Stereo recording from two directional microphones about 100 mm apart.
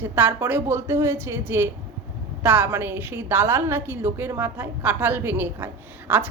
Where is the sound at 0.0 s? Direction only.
20° right (ahead or behind).